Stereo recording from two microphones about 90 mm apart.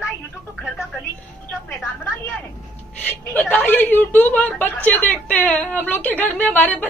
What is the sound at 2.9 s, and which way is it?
A woman's voice, 20° left (ahead or behind).